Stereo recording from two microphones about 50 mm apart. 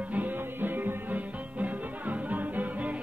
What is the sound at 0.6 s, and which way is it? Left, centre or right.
Music, right.